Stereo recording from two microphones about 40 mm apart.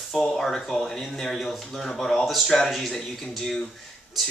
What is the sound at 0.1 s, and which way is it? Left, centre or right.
Speech, centre.